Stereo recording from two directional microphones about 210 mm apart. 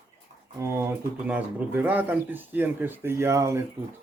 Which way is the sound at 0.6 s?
10° right (ahead or behind).